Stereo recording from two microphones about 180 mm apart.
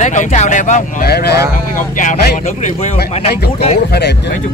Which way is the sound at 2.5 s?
40° left (ahead or behind).